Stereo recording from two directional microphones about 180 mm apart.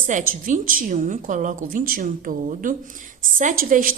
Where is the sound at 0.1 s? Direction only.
45° right (ahead or behind).